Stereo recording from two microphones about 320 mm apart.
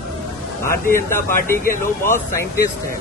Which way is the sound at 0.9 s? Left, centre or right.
Centre.